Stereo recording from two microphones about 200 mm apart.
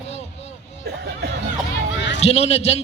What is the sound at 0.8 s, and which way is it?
Music, 55° right (ahead or behind).